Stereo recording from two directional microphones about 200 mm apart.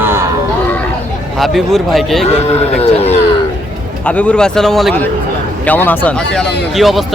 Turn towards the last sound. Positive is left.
turn(degrees=0)  # may be behind; listen again after turning